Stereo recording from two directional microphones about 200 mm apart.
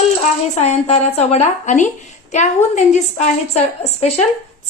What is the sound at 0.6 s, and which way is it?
A woman's voice, 35° left (ahead or behind).